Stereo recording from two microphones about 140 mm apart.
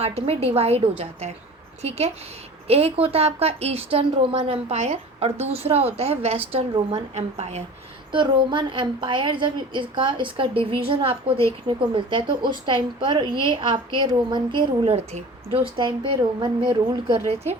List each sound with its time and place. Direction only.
0.0 s a woman's voice: 45° right (ahead or behind)
8.1 s a woman's voice: 35° right (ahead or behind)
14.9 s a woman's voice: 45° right (ahead or behind)